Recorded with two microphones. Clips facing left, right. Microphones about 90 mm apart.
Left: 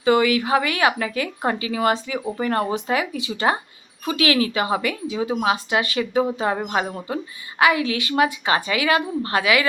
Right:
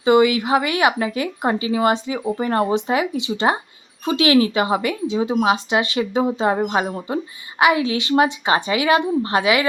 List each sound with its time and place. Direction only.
0.0 s a woman's voice: 25° right (ahead or behind)